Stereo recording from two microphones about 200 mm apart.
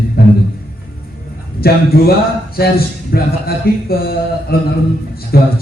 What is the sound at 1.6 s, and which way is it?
Speech, 50° left (ahead or behind).